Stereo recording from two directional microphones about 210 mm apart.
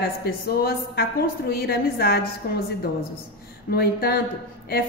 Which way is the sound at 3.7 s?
50° left (ahead or behind).